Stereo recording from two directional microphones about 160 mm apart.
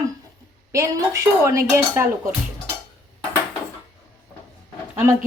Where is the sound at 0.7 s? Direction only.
20° right (ahead or behind).